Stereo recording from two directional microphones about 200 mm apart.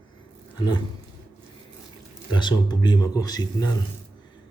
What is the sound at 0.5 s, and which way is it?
Roaring cats, 20° left (ahead or behind).